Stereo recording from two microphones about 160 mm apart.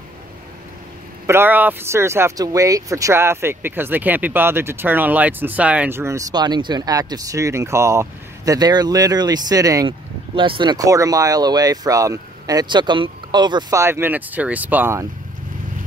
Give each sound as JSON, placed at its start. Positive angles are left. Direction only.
{"t": 1.2, "sound": "speech", "side_deg": -15}